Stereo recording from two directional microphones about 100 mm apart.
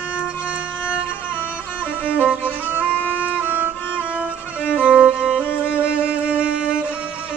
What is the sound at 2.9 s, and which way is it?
Music, 15° left (ahead or behind).